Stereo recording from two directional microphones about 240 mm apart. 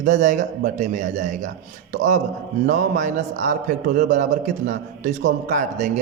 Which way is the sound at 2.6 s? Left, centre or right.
Right.